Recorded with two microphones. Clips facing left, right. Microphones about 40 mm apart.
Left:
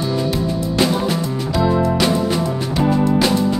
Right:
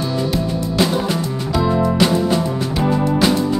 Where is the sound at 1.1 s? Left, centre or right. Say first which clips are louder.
Even; centre.